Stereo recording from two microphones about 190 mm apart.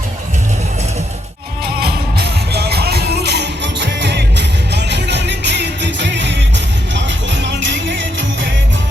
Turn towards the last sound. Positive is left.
turn(degrees=-70)  # may be behind; listen again after turning